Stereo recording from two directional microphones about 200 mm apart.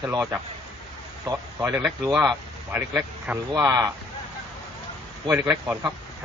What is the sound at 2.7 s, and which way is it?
Speech, 5° right (ahead or behind).